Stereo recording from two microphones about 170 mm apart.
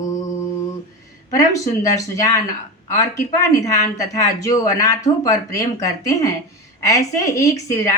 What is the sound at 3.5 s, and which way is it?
Speech, 20° left (ahead or behind).